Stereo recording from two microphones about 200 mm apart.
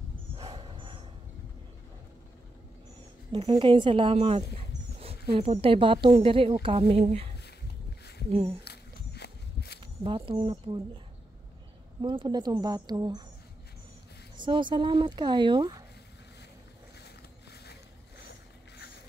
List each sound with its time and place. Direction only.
0.4 s dog: 25° right (ahead or behind)
3.3 s speech: 25° right (ahead or behind)
8.6 s walk: 55° left (ahead or behind)
10.0 s speech: 25° right (ahead or behind)
12.0 s speech: 25° right (ahead or behind)
14.3 s speech: 25° right (ahead or behind)
17.0 s boat: 55° left (ahead or behind)